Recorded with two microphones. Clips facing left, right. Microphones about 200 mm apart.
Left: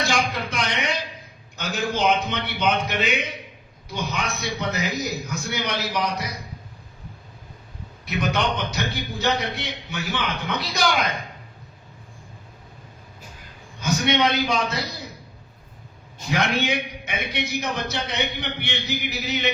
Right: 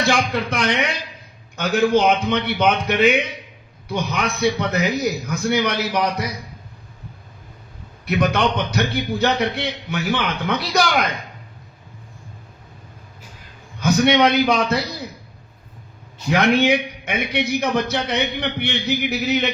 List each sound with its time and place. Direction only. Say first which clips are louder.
0.0 s a man's voice: right 5 dB; 60° right (ahead or behind)
8.0 s a man's voice: right 5 dB; 55° right (ahead or behind)
13.8 s a man's voice: right 6 dB; 60° right (ahead or behind)
16.3 s a man's voice: right 7 dB; 60° right (ahead or behind)